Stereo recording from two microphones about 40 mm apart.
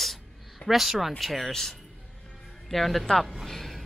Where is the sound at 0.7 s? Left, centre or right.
Centre.